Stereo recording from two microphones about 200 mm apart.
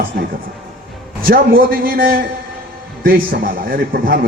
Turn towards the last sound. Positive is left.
turn(degrees=-45)  # may be behind; listen again after turning